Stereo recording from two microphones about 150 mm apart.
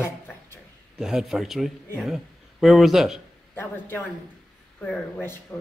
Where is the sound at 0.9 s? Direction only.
5° right (ahead or behind).